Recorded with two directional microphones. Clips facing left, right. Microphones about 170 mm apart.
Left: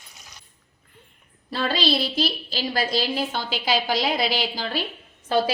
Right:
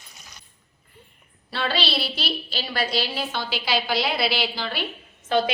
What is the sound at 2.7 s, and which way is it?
A woman's voice, 45° left (ahead or behind).